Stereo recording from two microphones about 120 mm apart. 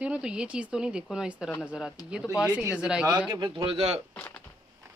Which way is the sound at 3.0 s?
35° right (ahead or behind).